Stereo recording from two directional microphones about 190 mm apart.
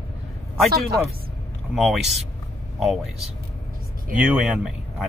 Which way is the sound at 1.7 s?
Centre (ahead or behind).